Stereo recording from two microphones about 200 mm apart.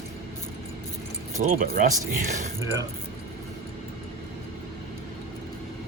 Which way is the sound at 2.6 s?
15° right (ahead or behind).